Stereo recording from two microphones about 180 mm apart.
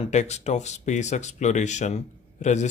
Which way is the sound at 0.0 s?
40° left (ahead or behind).